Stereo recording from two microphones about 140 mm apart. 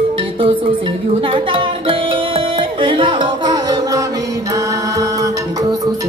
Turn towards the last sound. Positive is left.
turn(degrees=-25)  # may be behind; listen again after turning